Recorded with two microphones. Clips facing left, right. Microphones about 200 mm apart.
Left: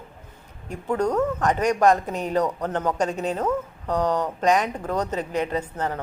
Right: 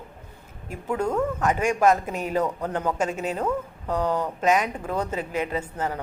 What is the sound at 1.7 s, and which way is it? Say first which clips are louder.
A woman's voice: left 2 dB; 5° right (ahead or behind).